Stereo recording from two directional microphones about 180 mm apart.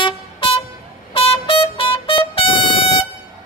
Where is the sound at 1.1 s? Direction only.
30° left (ahead or behind).